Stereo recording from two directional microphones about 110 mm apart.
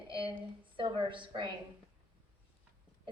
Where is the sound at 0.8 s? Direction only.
50° right (ahead or behind).